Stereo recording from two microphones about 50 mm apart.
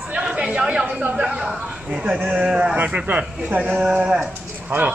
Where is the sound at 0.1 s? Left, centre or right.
Centre.